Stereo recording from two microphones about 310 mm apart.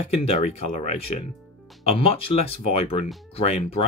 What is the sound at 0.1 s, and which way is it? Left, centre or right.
Speech, centre.